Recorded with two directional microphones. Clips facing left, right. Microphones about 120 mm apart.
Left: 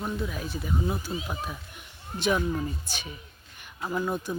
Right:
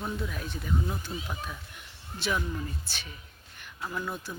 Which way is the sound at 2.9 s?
15° left (ahead or behind).